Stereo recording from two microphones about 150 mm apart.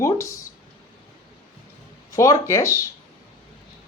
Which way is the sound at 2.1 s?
20° left (ahead or behind).